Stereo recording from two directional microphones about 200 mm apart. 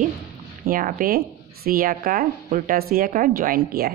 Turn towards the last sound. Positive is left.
turn(degrees=-50)  # may be behind; listen again after turning